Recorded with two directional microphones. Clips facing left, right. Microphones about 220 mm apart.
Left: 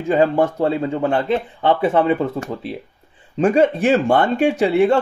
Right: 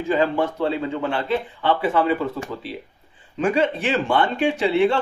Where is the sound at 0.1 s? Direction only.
40° left (ahead or behind).